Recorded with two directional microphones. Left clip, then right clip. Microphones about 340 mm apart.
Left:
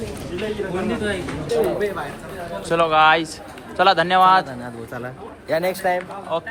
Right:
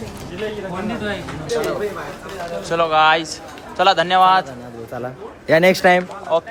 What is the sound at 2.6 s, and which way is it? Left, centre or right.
Speech, centre.